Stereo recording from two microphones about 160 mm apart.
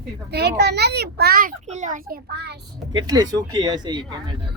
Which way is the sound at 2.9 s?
25° right (ahead or behind).